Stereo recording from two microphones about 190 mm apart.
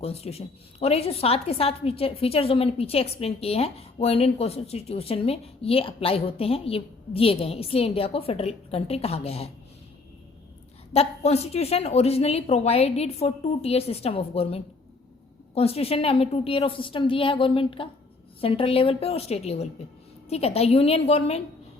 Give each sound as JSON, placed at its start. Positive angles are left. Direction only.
{"t": 0.0, "sound": "a woman's voice", "side_deg": 35}
{"t": 10.9, "sound": "a woman's voice", "side_deg": 35}